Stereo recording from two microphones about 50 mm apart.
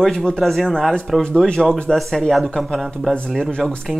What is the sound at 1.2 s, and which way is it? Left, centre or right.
Speech, centre.